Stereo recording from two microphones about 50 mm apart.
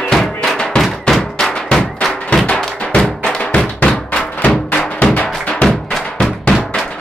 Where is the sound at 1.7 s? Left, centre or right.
Centre.